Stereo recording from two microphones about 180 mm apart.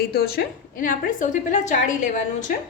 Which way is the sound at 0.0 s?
55° left (ahead or behind).